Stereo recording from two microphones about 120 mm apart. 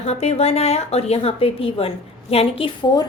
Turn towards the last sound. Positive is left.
turn(degrees=40)  # may be behind; listen again after turning